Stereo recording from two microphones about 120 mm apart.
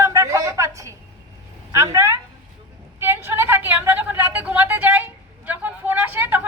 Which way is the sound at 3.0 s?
20° right (ahead or behind).